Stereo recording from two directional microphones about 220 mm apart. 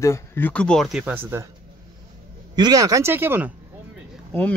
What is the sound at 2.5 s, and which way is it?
Speech, 15° right (ahead or behind).